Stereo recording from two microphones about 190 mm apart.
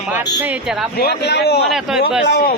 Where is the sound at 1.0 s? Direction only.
60° left (ahead or behind).